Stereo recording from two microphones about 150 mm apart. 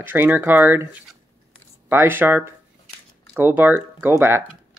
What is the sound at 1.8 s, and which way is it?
Speech, 15° right (ahead or behind).